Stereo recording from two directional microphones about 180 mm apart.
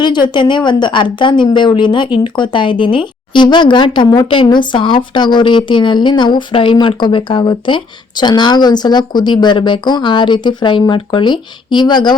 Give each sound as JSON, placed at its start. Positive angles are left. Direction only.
{"t": 0.0, "sound": "a woman's voice", "side_deg": 25}